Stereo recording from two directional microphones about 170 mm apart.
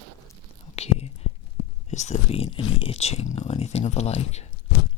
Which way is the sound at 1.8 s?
40° left (ahead or behind).